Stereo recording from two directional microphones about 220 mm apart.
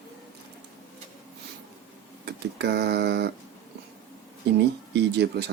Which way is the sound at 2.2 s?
50° right (ahead or behind).